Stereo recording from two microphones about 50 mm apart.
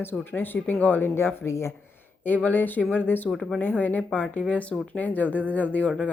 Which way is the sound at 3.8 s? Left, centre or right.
Left.